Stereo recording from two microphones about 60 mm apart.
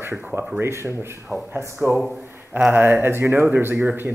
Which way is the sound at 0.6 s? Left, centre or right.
Right.